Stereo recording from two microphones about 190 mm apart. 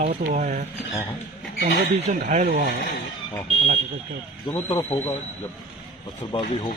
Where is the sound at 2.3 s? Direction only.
45° right (ahead or behind).